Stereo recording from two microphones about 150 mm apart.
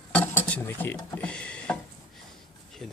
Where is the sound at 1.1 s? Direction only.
10° left (ahead or behind).